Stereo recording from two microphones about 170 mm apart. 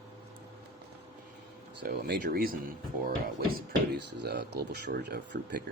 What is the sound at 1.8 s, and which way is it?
Speech, 65° right (ahead or behind).